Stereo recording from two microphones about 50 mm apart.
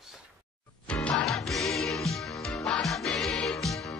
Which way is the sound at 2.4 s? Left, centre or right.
Centre.